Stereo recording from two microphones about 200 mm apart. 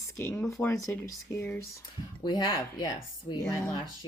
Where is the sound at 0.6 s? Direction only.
15° left (ahead or behind).